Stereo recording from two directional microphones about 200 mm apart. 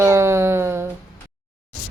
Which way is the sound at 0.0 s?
15° right (ahead or behind).